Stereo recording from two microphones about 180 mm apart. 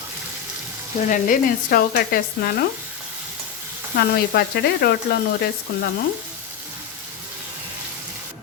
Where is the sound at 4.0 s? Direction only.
60° left (ahead or behind).